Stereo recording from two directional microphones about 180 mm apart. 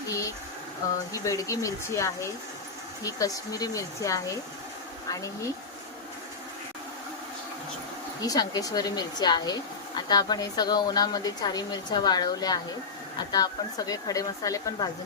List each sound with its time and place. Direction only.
0.1 s a sound: 20° left (ahead or behind)
1.1 s speech: 20° left (ahead or behind)
8.2 s speech: 20° left (ahead or behind)